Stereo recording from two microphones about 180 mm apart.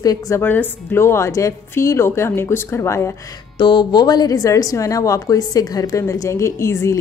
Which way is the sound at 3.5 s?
25° left (ahead or behind).